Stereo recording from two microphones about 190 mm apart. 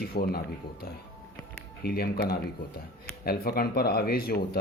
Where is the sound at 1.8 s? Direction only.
55° left (ahead or behind).